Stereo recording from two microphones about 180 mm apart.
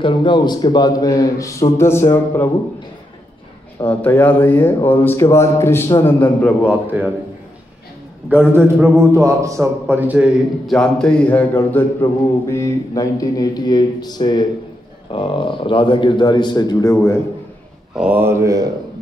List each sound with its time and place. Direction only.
0.0 s a man's voice: 25° left (ahead or behind)
3.9 s a man's voice: 10° left (ahead or behind)
6.7 s a man's voice: 10° right (ahead or behind)
8.7 s a sound: centre (ahead or behind)
9.1 s a man's voice: 15° right (ahead or behind); by 17.2 s 15° left (ahead or behind)
17.9 s a man's voice: 10° right (ahead or behind)